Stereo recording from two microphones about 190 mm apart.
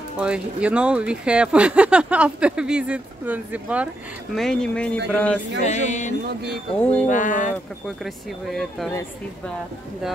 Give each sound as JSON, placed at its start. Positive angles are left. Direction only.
{"t": 0.2, "sound": "speech", "side_deg": -5}
{"t": 4.4, "sound": "speech", "side_deg": 5}
{"t": 5.6, "sound": "music", "side_deg": 40}
{"t": 6.8, "sound": "music", "side_deg": 10}
{"t": 7.1, "sound": "speech", "side_deg": 45}
{"t": 8.0, "sound": "speech", "side_deg": 0}